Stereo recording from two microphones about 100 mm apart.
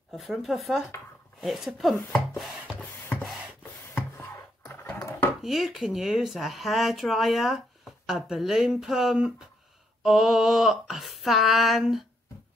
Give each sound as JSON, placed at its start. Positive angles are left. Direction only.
{"t": 0.1, "sound": "speech", "side_deg": 0}
{"t": 2.8, "sound": "a sound", "side_deg": 15}
{"t": 5.4, "sound": "speech", "side_deg": -5}